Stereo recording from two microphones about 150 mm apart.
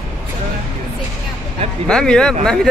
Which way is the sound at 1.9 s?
5° left (ahead or behind).